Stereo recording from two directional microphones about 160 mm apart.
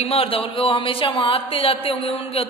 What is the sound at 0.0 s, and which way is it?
Speech, 35° left (ahead or behind).